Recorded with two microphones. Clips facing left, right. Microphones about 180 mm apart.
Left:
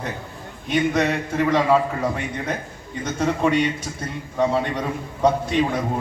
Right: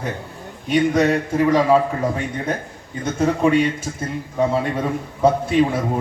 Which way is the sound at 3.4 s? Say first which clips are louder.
Right 3 dB; centre (ahead or behind).